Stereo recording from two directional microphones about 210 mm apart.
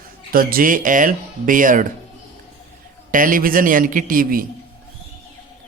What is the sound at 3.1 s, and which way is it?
Speech, 40° right (ahead or behind).